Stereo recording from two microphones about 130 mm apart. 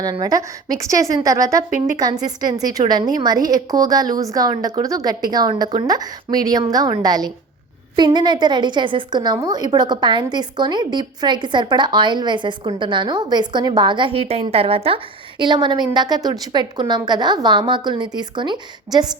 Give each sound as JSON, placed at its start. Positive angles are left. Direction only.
{"t": 0.0, "sound": "a woman's voice", "side_deg": -30}